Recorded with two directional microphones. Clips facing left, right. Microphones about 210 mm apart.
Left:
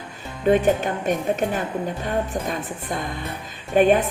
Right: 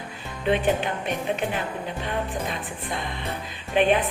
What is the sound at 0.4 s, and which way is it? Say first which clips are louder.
A woman's voice: left 5 dB; 45° left (ahead or behind).